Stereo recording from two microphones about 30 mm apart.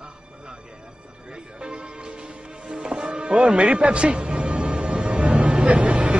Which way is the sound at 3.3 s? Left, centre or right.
Right.